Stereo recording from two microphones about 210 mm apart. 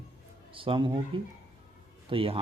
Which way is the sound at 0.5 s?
25° right (ahead or behind).